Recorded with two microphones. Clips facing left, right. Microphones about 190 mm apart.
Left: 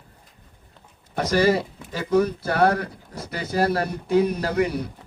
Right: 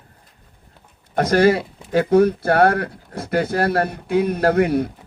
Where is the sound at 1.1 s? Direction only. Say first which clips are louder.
Right 4 dB; 55° right (ahead or behind).